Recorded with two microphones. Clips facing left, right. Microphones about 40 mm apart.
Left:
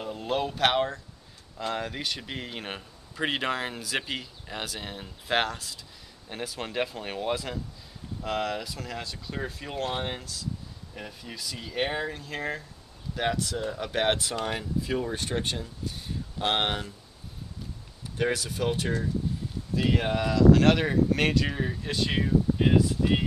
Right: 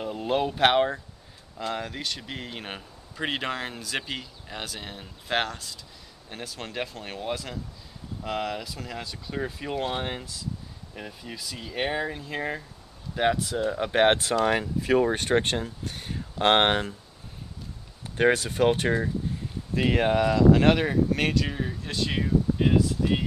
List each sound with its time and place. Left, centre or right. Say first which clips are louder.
0.0 s speech: right 3 dB; centre
1.6 s speech: even; centre
13.7 s speech: right 6 dB; right
14.3 s speech: right 6 dB; right
18.1 s speech: right 6 dB; right
19.8 s speech: right 4 dB; right
20.7 s speech: even; centre